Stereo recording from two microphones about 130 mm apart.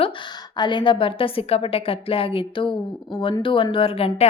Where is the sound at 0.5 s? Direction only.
35° left (ahead or behind).